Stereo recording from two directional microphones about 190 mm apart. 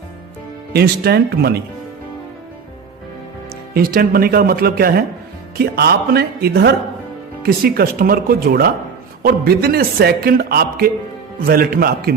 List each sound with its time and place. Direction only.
0.7 s speech: 60° right (ahead or behind)
3.8 s a man's voice: 50° right (ahead or behind)